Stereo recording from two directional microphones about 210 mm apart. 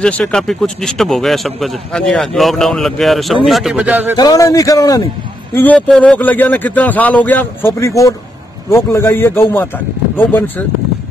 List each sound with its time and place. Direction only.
0.0 s speech: 5° left (ahead or behind)
4.2 s speech: 15° left (ahead or behind)